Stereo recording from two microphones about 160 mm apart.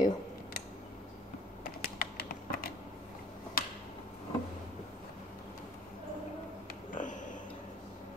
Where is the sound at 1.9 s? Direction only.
65° left (ahead or behind).